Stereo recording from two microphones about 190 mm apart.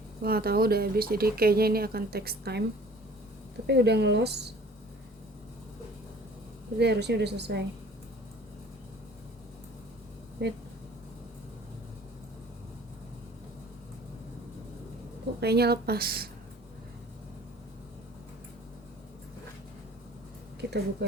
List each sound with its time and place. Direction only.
0.2 s speech: 55° right (ahead or behind)
3.7 s a woman's voice: 60° right (ahead or behind)
6.7 s a woman's voice: 60° right (ahead or behind)
10.4 s a woman's voice: 60° right (ahead or behind)
15.4 s a woman's voice: 60° right (ahead or behind)
20.6 s speech: 60° right (ahead or behind)